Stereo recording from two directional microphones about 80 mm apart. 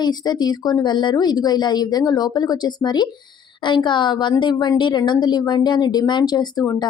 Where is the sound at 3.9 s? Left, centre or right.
Left.